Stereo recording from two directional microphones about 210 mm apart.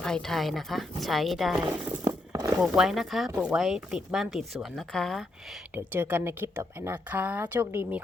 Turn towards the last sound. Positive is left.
turn(degrees=-10)  # may be behind; listen again after turning